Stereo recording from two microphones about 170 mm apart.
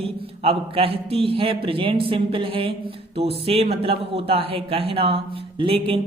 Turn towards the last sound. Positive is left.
turn(degrees=-35)  # may be behind; listen again after turning